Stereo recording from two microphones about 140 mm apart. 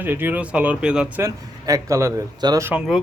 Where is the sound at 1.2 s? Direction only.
20° right (ahead or behind).